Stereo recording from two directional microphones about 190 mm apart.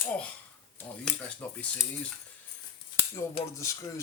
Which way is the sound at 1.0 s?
5° left (ahead or behind).